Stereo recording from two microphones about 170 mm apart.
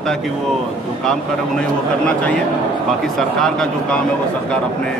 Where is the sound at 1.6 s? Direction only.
5° left (ahead or behind).